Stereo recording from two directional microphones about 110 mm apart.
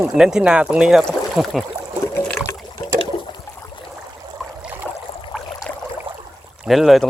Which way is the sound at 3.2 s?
45° left (ahead or behind).